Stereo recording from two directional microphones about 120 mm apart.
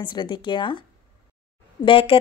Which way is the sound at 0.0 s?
40° left (ahead or behind).